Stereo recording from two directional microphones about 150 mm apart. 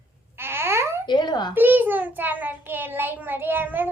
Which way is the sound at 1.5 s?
10° right (ahead or behind).